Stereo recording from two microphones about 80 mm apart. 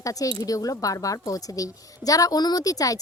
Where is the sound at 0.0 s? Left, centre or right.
Left.